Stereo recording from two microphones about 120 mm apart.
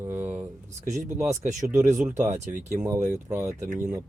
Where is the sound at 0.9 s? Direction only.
90° right.